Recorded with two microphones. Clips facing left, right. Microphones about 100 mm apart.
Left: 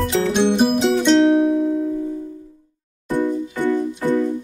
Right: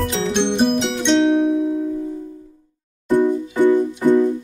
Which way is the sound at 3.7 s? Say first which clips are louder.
Right 4 dB; 20° right (ahead or behind).